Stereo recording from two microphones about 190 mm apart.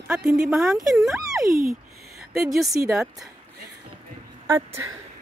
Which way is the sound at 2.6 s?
20° right (ahead or behind).